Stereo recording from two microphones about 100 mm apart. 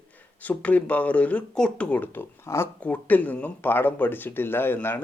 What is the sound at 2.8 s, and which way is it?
Speech, 15° left (ahead or behind).